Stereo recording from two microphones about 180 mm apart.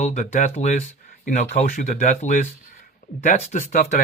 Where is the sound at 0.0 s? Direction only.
40° left (ahead or behind).